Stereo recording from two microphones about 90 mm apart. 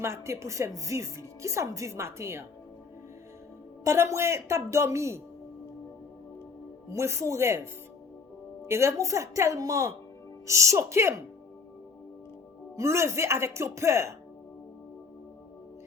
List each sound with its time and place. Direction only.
0.0 s speech: 30° right (ahead or behind)
3.8 s speech: 35° right (ahead or behind)
6.9 s speech: 35° right (ahead or behind)
12.7 s speech: 30° right (ahead or behind)